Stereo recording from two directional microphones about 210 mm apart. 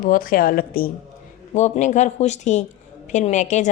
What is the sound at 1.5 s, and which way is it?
Speech, 35° left (ahead or behind).